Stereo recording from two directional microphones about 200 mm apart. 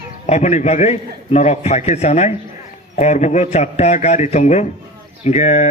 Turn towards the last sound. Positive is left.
turn(degrees=35)  # may be behind; listen again after turning